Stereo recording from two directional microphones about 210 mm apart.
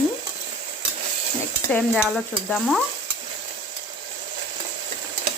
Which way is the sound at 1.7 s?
Centre (ahead or behind).